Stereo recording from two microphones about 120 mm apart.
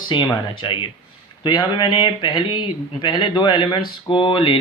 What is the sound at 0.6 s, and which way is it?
Speech, 45° left (ahead or behind).